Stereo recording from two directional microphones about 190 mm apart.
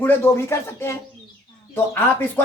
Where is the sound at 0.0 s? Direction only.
10° left (ahead or behind).